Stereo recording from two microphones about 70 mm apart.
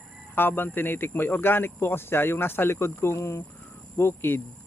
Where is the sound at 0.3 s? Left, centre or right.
Left.